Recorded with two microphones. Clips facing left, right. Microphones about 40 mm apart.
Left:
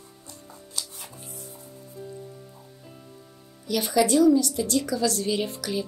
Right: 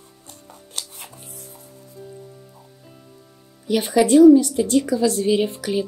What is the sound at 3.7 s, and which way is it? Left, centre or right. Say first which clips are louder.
A woman's voice: right 6 dB; right.